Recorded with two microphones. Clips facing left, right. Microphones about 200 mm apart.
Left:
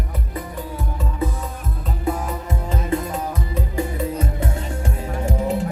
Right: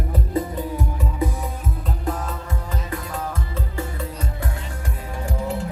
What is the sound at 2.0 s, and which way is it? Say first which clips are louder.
Music: left 4 dB; 10° left (ahead or behind).